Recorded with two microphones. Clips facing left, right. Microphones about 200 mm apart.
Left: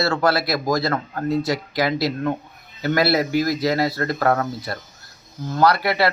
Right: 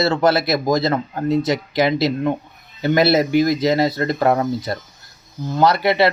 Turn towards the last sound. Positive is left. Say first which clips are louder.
# right 3 dB
turn(degrees=-25)  # may be behind; listen again after turning